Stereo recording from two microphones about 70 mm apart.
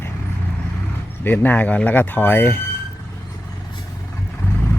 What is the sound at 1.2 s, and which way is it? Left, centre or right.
Speech, left.